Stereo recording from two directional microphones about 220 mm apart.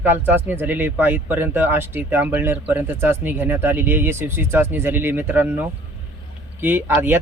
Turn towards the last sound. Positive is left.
turn(degrees=-10)  # may be behind; listen again after turning